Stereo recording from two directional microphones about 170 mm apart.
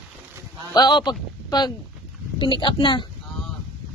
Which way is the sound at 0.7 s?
25° left (ahead or behind).